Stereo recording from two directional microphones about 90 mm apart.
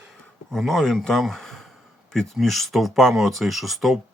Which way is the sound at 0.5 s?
Centre (ahead or behind).